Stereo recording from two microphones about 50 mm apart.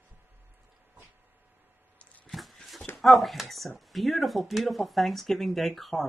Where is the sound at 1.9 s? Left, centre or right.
Left.